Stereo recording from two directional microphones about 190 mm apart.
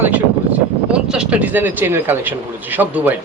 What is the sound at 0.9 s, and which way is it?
A man's voice, 5° right (ahead or behind).